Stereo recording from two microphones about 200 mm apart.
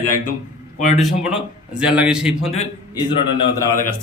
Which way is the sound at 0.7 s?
35° left (ahead or behind).